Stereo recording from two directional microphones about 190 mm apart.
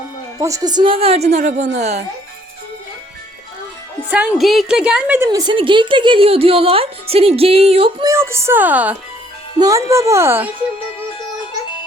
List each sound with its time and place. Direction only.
0.3 s a woman's voice: 20° right (ahead or behind); by 2.0 s 35° right (ahead or behind)
4.1 s a woman's voice: 5° right (ahead or behind); by 8.1 s 25° right (ahead or behind)
8.1 s speech: 15° right (ahead or behind)